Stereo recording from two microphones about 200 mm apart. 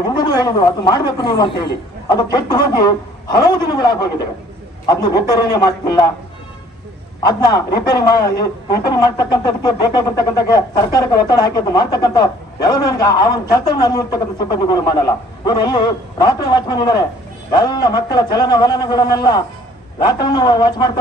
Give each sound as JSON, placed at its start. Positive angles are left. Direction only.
{"t": 0.1, "sound": "a woman's voice", "side_deg": 20}
{"t": 7.2, "sound": "a woman's voice", "side_deg": 20}